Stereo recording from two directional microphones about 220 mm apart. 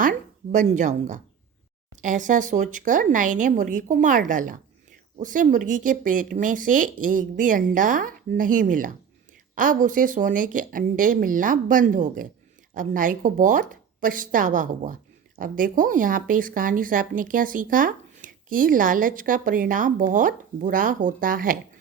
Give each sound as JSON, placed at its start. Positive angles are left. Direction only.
{"t": 0.0, "sound": "a woman's voice", "side_deg": -35}